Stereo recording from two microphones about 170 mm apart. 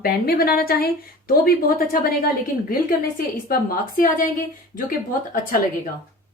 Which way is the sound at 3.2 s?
55° left (ahead or behind).